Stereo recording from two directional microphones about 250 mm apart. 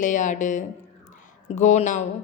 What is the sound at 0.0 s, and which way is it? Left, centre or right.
Speech, left.